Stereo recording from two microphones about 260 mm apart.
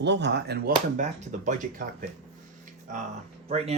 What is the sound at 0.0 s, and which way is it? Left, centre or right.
Speech, right.